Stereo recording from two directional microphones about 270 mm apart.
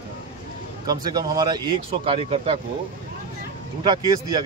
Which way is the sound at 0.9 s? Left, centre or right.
Centre.